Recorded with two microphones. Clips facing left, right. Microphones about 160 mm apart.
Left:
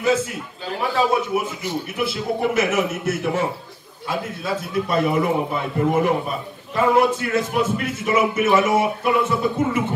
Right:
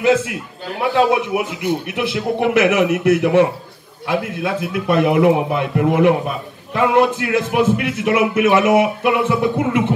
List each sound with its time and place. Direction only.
0.0 s a man's voice: 65° right (ahead or behind)
1.4 s a man's voice: 60° right (ahead or behind)